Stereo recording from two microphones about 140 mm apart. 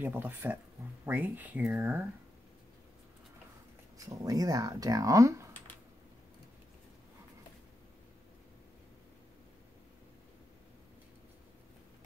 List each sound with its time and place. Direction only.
0.0 s speech: 15° right (ahead or behind)
4.1 s speech: 25° right (ahead or behind)